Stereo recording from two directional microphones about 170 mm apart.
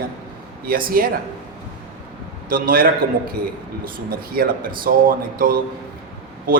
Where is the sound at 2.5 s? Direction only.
55° right (ahead or behind).